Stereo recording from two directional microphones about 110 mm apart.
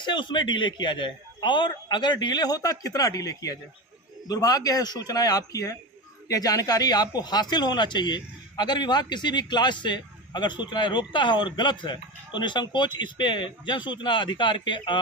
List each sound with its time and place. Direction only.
0.0 s a man's voice: 45° left (ahead or behind)